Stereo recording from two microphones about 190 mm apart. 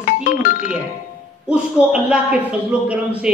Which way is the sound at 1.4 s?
5° right (ahead or behind).